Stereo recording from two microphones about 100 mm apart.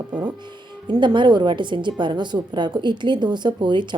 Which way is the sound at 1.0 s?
50° right (ahead or behind).